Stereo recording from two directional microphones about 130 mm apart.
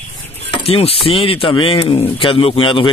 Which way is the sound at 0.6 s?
50° left (ahead or behind).